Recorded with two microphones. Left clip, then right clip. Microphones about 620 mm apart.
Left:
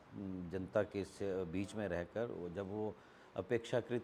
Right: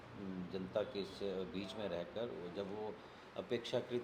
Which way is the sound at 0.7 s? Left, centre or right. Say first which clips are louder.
Left 3 dB; left.